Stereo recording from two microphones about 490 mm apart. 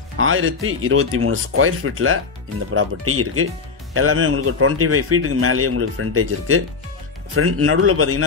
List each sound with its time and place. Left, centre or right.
0.2 s a man's voice: right